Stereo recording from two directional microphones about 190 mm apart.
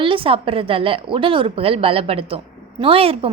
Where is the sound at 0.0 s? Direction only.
25° right (ahead or behind).